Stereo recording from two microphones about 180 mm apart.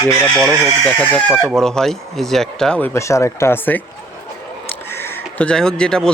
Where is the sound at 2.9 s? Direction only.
15° left (ahead or behind).